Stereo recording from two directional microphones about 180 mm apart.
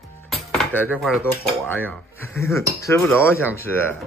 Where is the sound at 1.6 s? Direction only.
10° left (ahead or behind).